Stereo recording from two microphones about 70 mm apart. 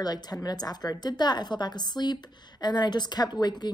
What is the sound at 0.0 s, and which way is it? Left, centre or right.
A woman's voice, left.